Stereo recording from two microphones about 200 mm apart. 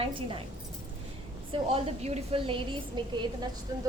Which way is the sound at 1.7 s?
30° right (ahead or behind).